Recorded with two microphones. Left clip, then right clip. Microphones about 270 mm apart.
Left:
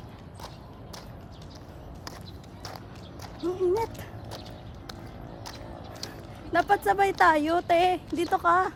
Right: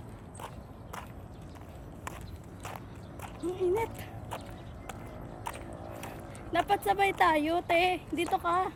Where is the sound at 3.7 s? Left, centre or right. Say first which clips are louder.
Left 3 dB; centre.